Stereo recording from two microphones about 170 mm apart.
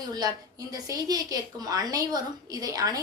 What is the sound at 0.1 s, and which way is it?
A woman's voice, 20° right (ahead or behind).